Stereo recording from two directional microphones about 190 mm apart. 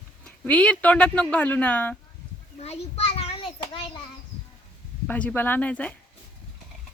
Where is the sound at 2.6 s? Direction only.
35° left (ahead or behind).